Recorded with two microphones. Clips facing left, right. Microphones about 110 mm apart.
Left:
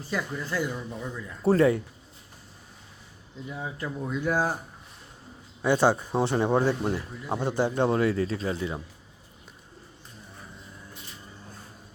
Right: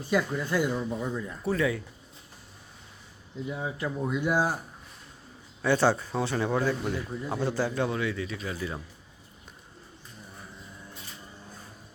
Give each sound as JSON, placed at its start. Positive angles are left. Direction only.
{"t": 0.1, "sound": "speech", "side_deg": -15}
{"t": 1.5, "sound": "speech", "side_deg": 35}
{"t": 3.5, "sound": "speech", "side_deg": -5}
{"t": 5.6, "sound": "speech", "side_deg": 15}
{"t": 7.9, "sound": "speech", "side_deg": 35}